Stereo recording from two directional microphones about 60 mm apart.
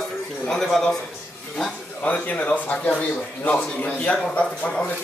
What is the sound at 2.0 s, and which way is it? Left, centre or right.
Speech, left.